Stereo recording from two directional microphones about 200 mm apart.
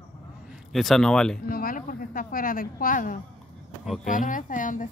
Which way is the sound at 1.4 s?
45° left (ahead or behind).